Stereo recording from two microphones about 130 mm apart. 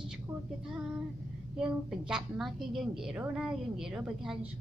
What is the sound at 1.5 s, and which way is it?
A woman's voice, 5° right (ahead or behind).